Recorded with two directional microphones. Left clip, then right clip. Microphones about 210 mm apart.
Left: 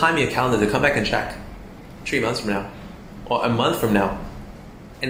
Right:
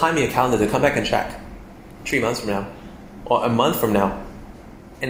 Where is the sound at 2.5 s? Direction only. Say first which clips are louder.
Right 1 dB; 40° right (ahead or behind).